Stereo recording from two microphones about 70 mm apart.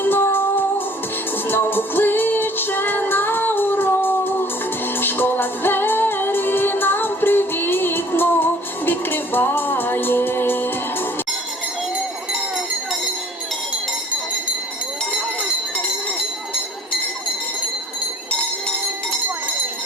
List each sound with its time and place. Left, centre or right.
0.0 s music: left
1.5 s music: left